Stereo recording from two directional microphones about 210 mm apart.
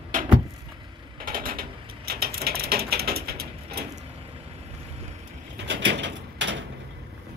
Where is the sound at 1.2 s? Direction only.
45° right (ahead or behind).